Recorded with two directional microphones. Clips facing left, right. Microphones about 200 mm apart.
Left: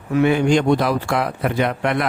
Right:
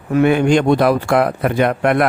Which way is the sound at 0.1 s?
55° right (ahead or behind).